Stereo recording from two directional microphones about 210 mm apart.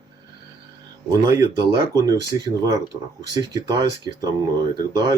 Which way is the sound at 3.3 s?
15° right (ahead or behind).